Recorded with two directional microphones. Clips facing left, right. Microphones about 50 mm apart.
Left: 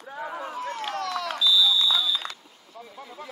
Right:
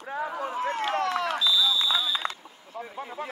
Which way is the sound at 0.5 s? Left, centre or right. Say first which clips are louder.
Right 6 dB; right.